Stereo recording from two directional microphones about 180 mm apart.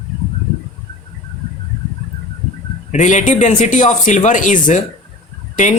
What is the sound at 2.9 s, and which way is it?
A man's voice, 45° left (ahead or behind).